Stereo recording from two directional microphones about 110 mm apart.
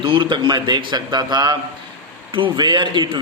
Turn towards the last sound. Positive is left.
turn(degrees=-45)  # may be behind; listen again after turning